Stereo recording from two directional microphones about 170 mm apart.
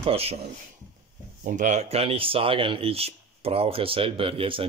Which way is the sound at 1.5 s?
45° right (ahead or behind).